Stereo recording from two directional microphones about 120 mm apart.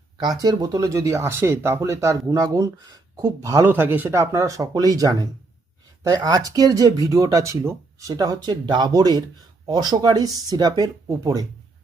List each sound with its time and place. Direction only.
0.2 s speech: 35° right (ahead or behind)